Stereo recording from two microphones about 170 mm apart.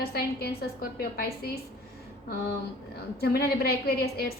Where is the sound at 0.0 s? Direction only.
65° left (ahead or behind).